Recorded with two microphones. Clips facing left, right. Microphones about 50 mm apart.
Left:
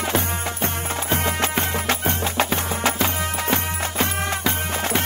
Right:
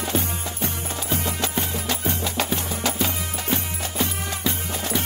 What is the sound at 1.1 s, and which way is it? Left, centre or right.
Music, left.